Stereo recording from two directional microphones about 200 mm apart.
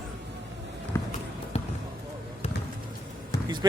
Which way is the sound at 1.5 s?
30° left (ahead or behind).